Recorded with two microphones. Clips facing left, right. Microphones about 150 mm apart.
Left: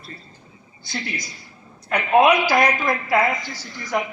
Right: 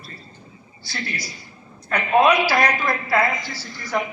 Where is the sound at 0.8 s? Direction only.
20° left (ahead or behind).